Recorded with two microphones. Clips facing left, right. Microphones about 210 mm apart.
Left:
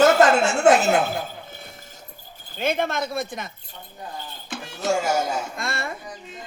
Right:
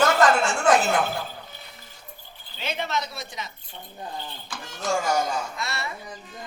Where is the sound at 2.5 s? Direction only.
50° left (ahead or behind).